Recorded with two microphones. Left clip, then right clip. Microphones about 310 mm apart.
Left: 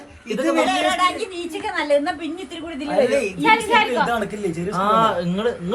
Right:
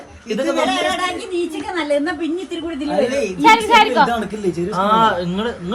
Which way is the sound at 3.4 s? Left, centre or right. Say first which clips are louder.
Right 6 dB; right.